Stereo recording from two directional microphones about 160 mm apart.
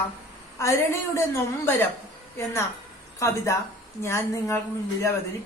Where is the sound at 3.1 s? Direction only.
20° left (ahead or behind).